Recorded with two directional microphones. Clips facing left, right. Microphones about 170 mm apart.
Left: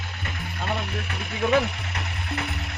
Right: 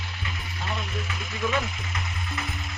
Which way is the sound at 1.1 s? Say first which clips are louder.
Left 7 dB; 65° left (ahead or behind).